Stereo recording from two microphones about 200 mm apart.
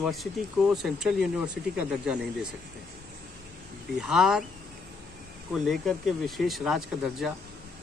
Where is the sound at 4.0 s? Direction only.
Centre (ahead or behind).